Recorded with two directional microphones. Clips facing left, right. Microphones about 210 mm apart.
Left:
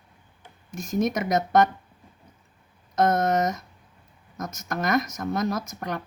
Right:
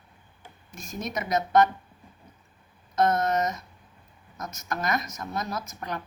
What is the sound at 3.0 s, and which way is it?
A woman's voice, 50° left (ahead or behind).